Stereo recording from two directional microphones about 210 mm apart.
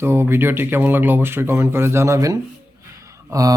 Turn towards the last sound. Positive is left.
turn(degrees=-15)  # may be behind; listen again after turning